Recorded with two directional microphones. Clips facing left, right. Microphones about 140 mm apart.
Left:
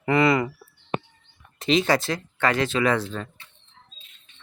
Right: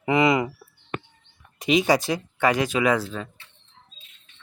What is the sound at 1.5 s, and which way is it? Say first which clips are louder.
Speech: right 1 dB; 15° right (ahead or behind).